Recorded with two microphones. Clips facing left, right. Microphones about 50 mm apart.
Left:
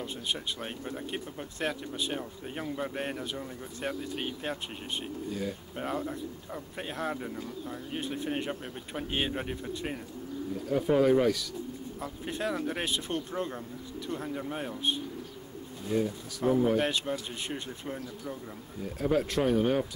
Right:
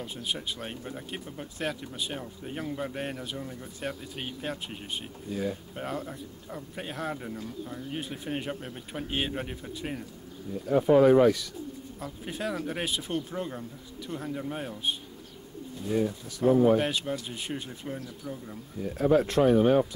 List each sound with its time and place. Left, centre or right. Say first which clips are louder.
0.0 s speech: even; centre
5.8 s speech: left 2 dB; centre
11.0 s speech: right 5 dB; right
12.3 s speech: left 1 dB; centre
18.9 s speech: right 5 dB; right